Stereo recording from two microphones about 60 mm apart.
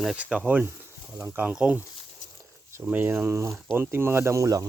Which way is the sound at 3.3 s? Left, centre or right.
Right.